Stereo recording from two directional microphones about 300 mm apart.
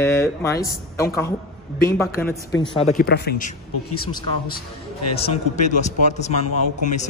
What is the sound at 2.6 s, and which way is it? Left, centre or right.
Speech, centre.